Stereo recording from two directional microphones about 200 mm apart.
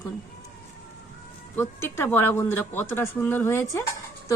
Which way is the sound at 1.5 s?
10° left (ahead or behind).